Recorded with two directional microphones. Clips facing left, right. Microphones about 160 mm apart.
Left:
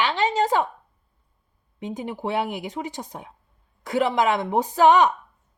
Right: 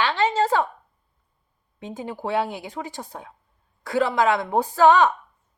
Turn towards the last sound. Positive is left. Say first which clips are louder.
# even
turn(degrees=20)  # may be behind; listen again after turning